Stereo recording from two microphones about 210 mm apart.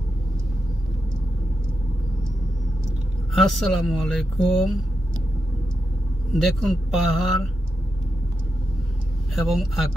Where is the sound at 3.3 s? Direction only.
Centre (ahead or behind).